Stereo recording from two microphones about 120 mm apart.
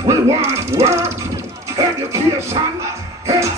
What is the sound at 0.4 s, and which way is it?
Speech, 25° right (ahead or behind).